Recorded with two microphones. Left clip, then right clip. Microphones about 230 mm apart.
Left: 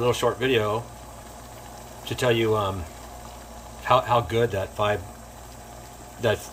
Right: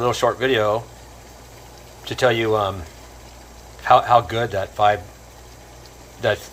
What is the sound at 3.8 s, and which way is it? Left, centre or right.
Speech, centre.